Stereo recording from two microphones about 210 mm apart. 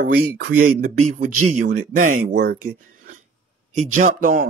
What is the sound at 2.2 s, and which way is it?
Speech, 50° right (ahead or behind).